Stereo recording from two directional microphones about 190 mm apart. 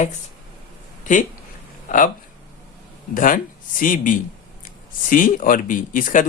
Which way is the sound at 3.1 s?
45° left (ahead or behind).